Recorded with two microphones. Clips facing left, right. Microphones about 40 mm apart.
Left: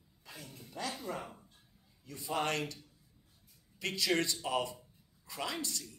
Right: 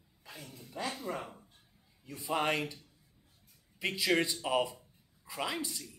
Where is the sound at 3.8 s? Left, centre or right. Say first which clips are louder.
Right 2 dB; centre.